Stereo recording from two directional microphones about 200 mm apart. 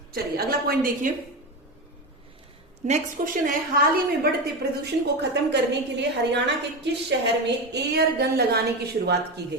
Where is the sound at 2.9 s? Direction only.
40° right (ahead or behind).